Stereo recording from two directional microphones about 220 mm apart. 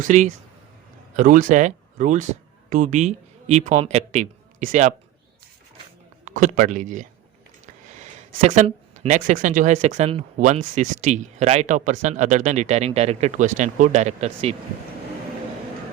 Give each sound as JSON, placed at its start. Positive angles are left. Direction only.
{"t": 0.0, "sound": "speech", "side_deg": -35}
{"t": 6.2, "sound": "speech", "side_deg": -35}